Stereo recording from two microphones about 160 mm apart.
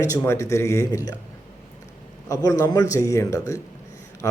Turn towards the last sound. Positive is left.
turn(degrees=20)  # may be behind; listen again after turning